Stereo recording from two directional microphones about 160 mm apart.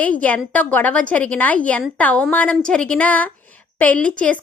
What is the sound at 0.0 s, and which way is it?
A woman's voice, 10° left (ahead or behind).